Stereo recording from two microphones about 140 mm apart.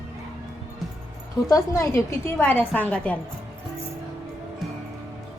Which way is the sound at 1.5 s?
25° left (ahead or behind).